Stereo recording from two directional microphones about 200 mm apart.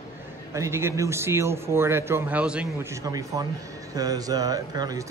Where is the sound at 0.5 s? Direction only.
15° right (ahead or behind).